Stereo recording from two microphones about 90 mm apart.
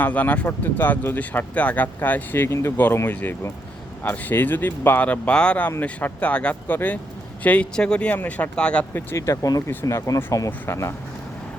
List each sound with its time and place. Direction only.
0.0 s speech: 20° left (ahead or behind)
8.9 s speech: 25° left (ahead or behind)
9.2 s speech: 40° left (ahead or behind)